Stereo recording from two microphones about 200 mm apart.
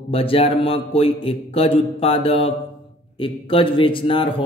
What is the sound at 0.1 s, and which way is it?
A man's voice, 30° left (ahead or behind).